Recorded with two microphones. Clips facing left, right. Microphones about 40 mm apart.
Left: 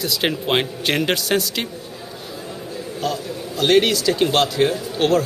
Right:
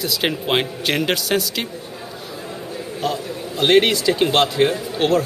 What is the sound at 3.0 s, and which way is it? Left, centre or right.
A man's voice, right.